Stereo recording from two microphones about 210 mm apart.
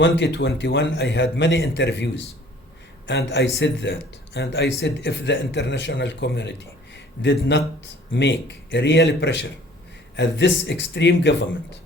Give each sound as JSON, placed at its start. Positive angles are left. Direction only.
{"t": 0.0, "sound": "speech", "side_deg": 55}